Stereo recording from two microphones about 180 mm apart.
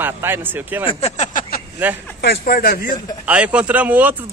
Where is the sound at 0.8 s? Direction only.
35° left (ahead or behind).